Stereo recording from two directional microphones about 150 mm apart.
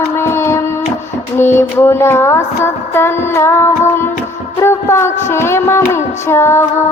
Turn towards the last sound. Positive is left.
turn(degrees=15)  # may be behind; listen again after turning